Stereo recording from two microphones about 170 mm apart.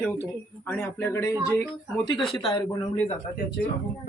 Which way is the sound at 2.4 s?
25° left (ahead or behind).